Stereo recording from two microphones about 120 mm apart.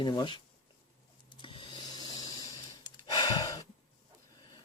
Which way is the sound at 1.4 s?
45° left (ahead or behind).